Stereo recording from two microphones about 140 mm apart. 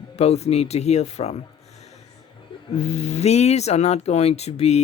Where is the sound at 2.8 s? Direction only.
50° left (ahead or behind).